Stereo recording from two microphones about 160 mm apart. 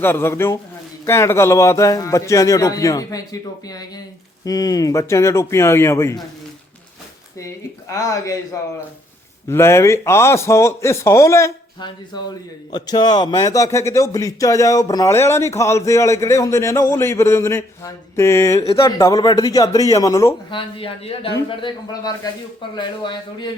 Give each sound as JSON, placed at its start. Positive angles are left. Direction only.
{"t": 0.0, "sound": "speech", "side_deg": 15}
{"t": 7.9, "sound": "speech", "side_deg": 20}
{"t": 9.5, "sound": "speech", "side_deg": 15}
{"t": 12.7, "sound": "speech", "side_deg": 25}
{"t": 20.5, "sound": "speech", "side_deg": 30}